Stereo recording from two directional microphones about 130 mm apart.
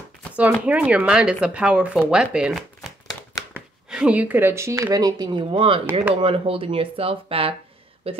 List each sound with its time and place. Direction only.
0.4 s speech: 10° right (ahead or behind); by 8.2 s 50° right (ahead or behind)